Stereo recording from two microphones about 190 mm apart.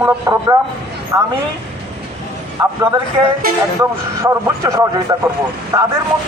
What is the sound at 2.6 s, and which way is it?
Speech, 15° right (ahead or behind).